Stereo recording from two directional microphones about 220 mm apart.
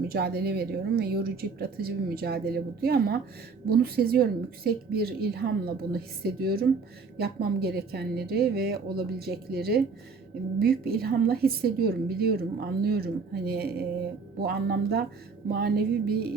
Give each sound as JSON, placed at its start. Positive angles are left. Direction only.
{"t": 0.1, "sound": "a woman's voice", "side_deg": -45}